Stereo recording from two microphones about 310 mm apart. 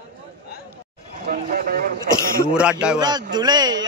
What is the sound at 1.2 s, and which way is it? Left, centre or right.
Speech, right.